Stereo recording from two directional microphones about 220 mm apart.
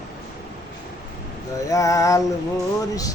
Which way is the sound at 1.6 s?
15° left (ahead or behind).